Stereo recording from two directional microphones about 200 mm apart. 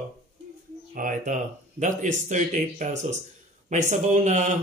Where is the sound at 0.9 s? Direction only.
40° right (ahead or behind).